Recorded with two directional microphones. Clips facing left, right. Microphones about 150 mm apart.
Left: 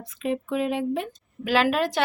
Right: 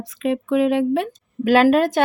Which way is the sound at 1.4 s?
50° right (ahead or behind).